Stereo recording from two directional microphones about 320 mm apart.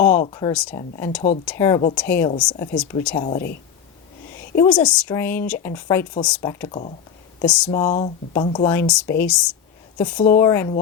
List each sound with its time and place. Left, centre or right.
0.1 s speech: left
0.3 s speech: centre
3.2 s speech: centre
4.4 s speech: centre
7.4 s speech: centre
7.7 s speech: centre